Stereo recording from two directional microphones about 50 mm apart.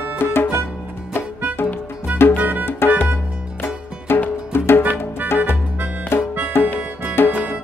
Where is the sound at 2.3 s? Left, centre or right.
Right.